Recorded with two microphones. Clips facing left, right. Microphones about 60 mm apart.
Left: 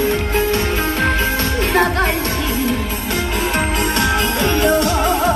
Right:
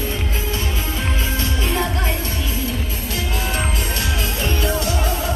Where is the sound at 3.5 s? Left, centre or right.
Left.